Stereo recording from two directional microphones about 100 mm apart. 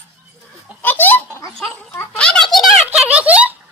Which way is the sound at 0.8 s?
20° left (ahead or behind).